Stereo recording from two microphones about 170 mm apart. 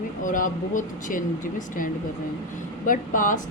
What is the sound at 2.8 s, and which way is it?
Speech, 50° left (ahead or behind).